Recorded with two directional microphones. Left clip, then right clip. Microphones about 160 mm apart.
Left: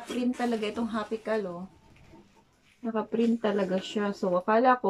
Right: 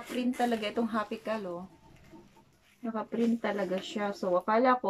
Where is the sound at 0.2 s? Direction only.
Centre (ahead or behind).